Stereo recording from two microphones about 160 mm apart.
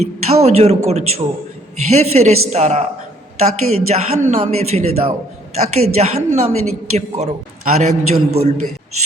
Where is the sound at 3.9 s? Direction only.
40° right (ahead or behind).